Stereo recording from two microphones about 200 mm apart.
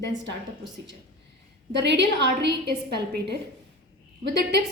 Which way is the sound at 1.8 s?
60° right (ahead or behind).